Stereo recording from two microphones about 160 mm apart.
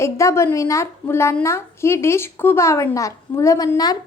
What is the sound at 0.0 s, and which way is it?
A woman's voice, 15° left (ahead or behind).